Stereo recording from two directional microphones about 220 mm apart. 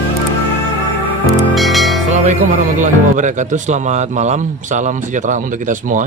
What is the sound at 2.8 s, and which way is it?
Speech, 35° right (ahead or behind).